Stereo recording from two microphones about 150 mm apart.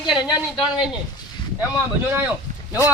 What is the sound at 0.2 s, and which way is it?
Speech, 30° left (ahead or behind).